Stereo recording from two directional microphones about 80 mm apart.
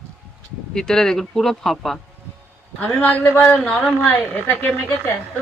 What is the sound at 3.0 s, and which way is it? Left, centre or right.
Speech, left.